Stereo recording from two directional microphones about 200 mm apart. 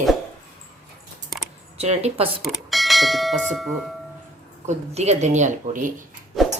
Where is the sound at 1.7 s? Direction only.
30° right (ahead or behind).